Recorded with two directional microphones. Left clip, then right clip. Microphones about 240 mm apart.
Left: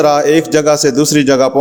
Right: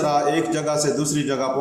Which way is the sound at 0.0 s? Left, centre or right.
Left.